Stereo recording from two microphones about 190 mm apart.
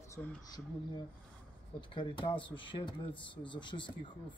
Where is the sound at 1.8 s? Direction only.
25° left (ahead or behind).